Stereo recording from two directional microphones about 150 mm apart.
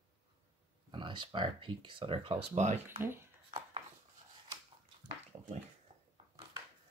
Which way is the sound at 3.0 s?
15° right (ahead or behind).